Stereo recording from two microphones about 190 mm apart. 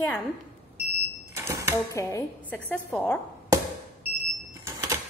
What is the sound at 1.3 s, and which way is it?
Cash register, 15° right (ahead or behind).